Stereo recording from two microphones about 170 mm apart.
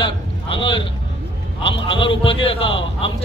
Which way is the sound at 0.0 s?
30° left (ahead or behind).